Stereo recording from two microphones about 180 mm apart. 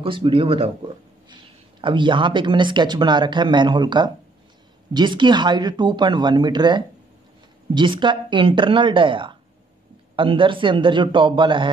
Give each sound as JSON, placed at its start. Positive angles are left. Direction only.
{"t": 0.0, "sound": "speech", "side_deg": -30}